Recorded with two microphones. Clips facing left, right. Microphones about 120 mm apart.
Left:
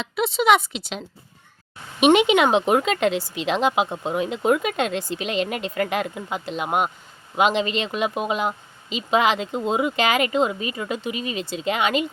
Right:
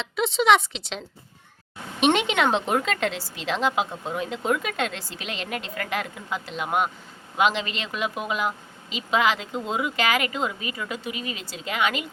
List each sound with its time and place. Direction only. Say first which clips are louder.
0.0 s speech: left 2 dB; 5° left (ahead or behind); by 12.0 s 25° left (ahead or behind)